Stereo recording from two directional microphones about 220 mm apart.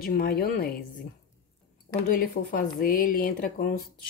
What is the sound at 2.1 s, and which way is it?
Speech, 40° left (ahead or behind).